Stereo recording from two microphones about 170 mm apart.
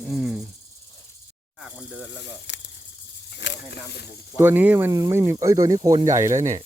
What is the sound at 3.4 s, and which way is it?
Speech, 70° left (ahead or behind).